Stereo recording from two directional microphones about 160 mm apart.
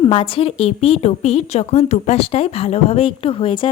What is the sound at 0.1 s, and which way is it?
A woman's voice, 35° left (ahead or behind).